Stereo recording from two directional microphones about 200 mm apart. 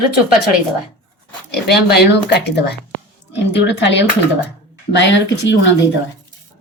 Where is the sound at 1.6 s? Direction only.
55° left (ahead or behind).